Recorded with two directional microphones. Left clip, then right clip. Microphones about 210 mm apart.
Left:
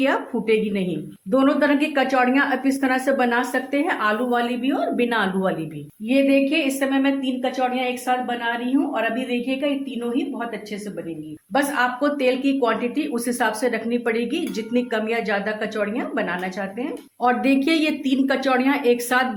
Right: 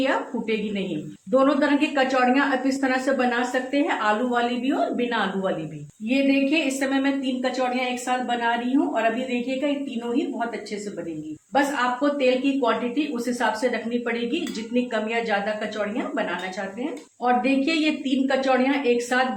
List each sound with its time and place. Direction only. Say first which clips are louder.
0.0 s a woman's voice: left 3 dB; 45° left (ahead or behind)
6.1 s a woman's voice: left 3 dB; 40° left (ahead or behind)
11.5 s speech: left 1 dB; 45° left (ahead or behind)
17.2 s speech: left 2 dB; 50° left (ahead or behind)